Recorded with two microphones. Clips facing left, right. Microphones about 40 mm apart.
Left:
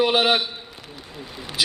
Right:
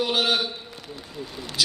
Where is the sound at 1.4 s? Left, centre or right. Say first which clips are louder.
Left 1 dB; centre.